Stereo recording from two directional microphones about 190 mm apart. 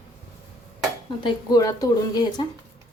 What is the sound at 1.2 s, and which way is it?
Speech, 20° left (ahead or behind).